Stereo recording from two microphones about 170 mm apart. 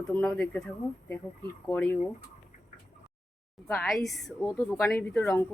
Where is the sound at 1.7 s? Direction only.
10° left (ahead or behind).